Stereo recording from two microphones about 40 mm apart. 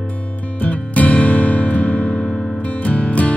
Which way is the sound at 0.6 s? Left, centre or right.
Left.